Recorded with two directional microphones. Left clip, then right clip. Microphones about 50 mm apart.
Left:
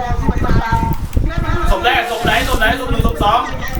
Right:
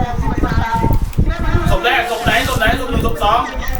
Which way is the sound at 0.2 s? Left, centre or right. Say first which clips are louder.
Even; centre.